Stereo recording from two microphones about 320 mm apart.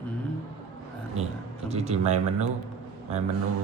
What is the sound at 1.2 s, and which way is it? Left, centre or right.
Speech, centre.